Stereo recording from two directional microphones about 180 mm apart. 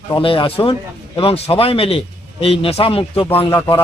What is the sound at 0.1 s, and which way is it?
A man's voice, 30° left (ahead or behind).